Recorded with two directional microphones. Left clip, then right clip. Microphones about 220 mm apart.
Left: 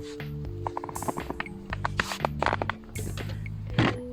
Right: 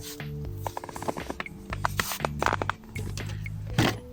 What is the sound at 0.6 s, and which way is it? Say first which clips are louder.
Music: left 1 dB; 45° right (ahead or behind).